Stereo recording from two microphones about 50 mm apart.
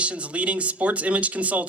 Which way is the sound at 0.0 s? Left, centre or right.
Right.